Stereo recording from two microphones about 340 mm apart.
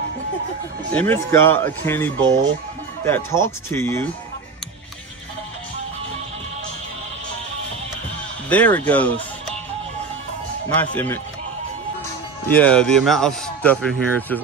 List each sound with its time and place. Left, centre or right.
0.9 s speech: centre
8.5 s speech: centre
10.7 s speech: centre
12.4 s speech: centre